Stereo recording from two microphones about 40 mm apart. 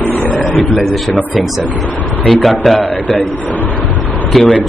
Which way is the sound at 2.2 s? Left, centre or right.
Centre.